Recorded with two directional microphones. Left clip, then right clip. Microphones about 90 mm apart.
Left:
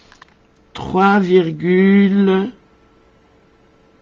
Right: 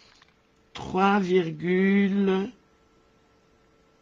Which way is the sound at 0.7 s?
20° right (ahead or behind).